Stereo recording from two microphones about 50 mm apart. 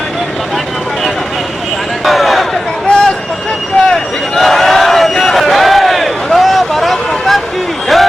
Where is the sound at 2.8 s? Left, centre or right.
Left.